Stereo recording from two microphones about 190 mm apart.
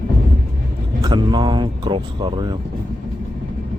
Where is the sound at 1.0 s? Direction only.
25° right (ahead or behind).